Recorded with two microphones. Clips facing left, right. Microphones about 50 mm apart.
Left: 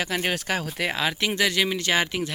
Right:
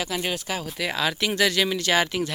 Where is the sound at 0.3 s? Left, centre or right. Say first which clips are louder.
Left 3 dB; left.